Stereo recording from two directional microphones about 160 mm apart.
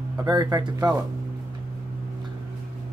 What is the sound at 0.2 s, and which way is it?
Speech, 20° right (ahead or behind).